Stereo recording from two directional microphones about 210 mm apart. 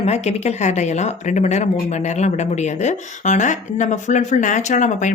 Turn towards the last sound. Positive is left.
turn(degrees=35)  # may be behind; listen again after turning